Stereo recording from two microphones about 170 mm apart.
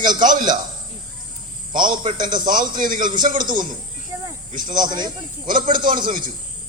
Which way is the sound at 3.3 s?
25° right (ahead or behind).